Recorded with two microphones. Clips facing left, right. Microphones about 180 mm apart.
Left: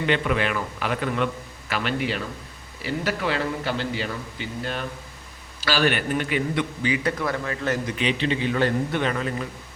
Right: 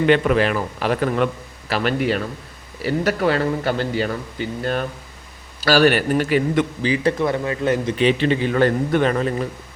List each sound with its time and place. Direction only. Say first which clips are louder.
0.0 s a man's voice: right 7 dB; 50° right (ahead or behind); by 7.9 s 20° right (ahead or behind)
7.9 s a man's voice: right 7 dB; 45° right (ahead or behind)